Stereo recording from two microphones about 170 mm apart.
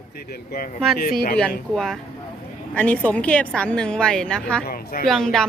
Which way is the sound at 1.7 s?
5° left (ahead or behind).